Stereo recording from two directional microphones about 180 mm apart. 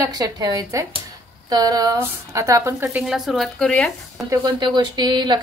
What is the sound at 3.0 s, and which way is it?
A woman's voice, centre (ahead or behind).